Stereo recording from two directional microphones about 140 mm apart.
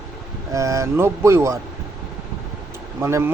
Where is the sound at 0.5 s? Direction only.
20° right (ahead or behind).